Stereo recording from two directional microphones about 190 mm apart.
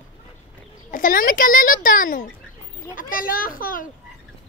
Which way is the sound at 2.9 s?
45° left (ahead or behind).